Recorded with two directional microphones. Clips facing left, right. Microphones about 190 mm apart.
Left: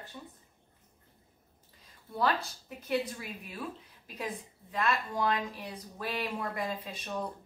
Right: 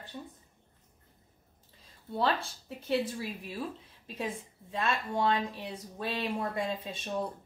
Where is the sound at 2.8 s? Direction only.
30° right (ahead or behind).